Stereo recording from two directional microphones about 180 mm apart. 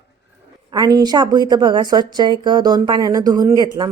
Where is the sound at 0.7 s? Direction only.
20° right (ahead or behind).